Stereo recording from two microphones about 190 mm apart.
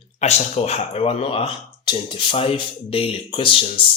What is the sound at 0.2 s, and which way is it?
Speech, 35° left (ahead or behind).